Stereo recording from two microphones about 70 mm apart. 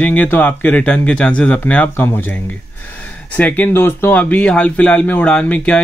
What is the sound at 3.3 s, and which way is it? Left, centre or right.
Speech, left.